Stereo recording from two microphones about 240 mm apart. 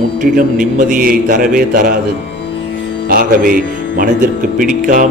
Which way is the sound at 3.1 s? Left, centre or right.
Right.